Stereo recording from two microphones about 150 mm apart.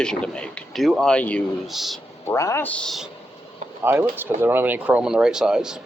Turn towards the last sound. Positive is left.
turn(degrees=-5)  # may be behind; listen again after turning